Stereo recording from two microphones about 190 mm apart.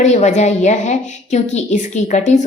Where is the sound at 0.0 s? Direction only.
35° left (ahead or behind).